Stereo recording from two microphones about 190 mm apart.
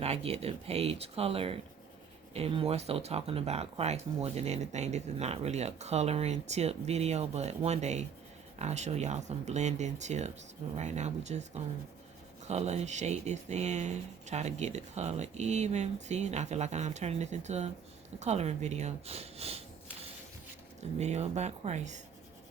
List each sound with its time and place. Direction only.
0.0 s speech: 30° right (ahead or behind)
21.0 s speech: 35° right (ahead or behind)